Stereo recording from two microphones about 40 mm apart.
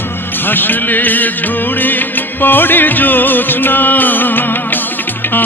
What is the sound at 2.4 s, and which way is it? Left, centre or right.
Music, left.